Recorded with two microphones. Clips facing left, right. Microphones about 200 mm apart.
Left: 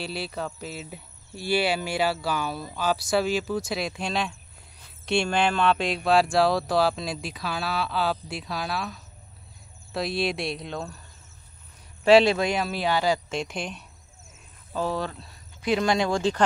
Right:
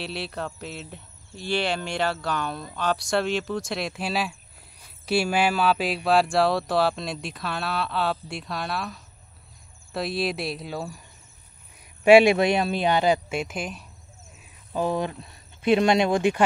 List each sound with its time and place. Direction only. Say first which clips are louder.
0.0 s speech: even; centre (ahead or behind)
12.0 s speech: right 3 dB; 15° right (ahead or behind)
13.3 s speech: right 1 dB; 5° right (ahead or behind)
14.7 s speech: right 3 dB; 15° right (ahead or behind)